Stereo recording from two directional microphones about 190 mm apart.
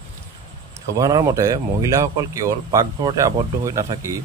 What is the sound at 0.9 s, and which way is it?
Speech, 20° right (ahead or behind).